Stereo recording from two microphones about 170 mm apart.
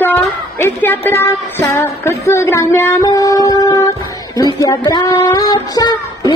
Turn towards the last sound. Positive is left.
turn(degrees=25)  # may be behind; listen again after turning